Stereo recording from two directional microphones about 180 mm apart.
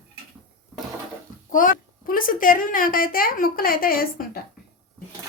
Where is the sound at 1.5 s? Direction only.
50° left (ahead or behind).